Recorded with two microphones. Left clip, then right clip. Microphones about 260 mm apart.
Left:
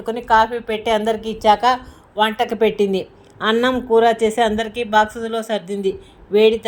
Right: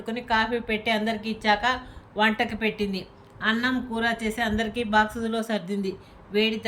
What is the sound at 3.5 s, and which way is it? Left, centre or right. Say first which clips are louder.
Speech: left 12 dB; centre.